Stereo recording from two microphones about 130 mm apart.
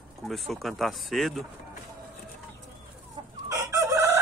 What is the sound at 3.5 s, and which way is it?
Chicken, 25° right (ahead or behind).